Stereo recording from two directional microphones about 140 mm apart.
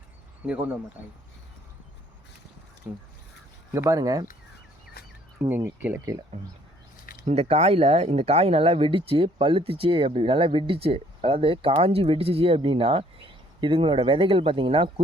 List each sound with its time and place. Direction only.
0.4 s speech: 10° right (ahead or behind)
2.8 s speech: 10° right (ahead or behind)
3.7 s speech: 25° right (ahead or behind)
5.0 s bird: 90° left
5.4 s speech: 15° right (ahead or behind)
7.0 s a sound: 90° left
7.3 s speech: 50° right (ahead or behind)